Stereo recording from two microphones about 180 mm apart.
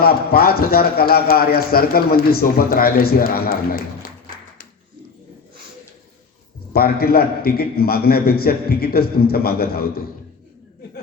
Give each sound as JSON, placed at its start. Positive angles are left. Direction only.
{"t": 0.0, "sound": "a man's voice", "side_deg": 60}
{"t": 6.7, "sound": "a man's voice", "side_deg": 60}